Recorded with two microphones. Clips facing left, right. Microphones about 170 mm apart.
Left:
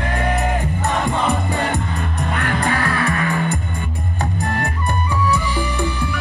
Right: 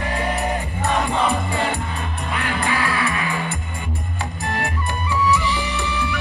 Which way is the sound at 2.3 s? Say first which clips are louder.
Left 2 dB; 50° left (ahead or behind).